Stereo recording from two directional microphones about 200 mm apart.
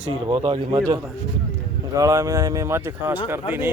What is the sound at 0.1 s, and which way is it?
Speech, 25° right (ahead or behind).